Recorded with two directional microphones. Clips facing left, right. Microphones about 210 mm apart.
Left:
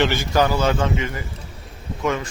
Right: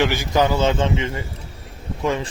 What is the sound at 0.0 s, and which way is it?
A man's voice, 15° right (ahead or behind).